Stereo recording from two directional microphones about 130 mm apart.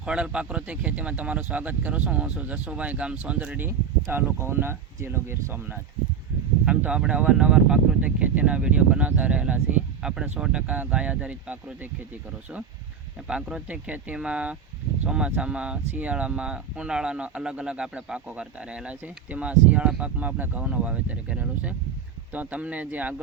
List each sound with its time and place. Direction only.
0.0 s speech: 5° right (ahead or behind)
13.2 s speech: 5° right (ahead or behind)